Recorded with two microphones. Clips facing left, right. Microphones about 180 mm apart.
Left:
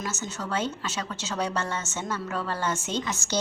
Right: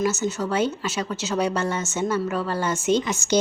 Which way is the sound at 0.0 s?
5° right (ahead or behind).